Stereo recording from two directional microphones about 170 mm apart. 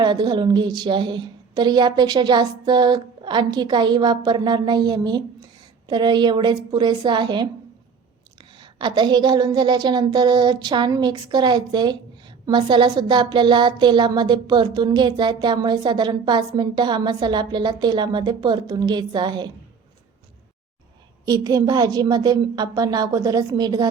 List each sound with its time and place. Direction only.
0.0 s a woman's voice: 25° right (ahead or behind)
21.2 s a woman's voice: 20° right (ahead or behind)